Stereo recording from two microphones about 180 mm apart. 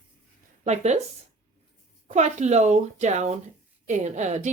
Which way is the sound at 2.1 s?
40° right (ahead or behind).